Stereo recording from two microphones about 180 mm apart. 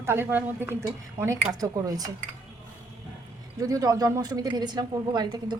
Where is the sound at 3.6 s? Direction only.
20° right (ahead or behind).